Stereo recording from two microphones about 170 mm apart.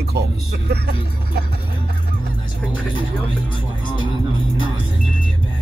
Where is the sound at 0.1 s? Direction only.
70° right (ahead or behind).